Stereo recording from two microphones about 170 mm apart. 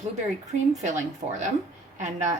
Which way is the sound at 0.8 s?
45° right (ahead or behind).